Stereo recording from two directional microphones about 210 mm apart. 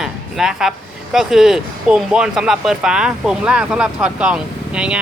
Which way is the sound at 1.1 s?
Centre (ahead or behind).